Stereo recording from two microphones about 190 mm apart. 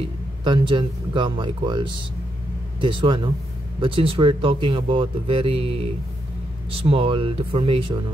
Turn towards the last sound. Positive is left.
turn(degrees=-30)  # may be behind; listen again after turning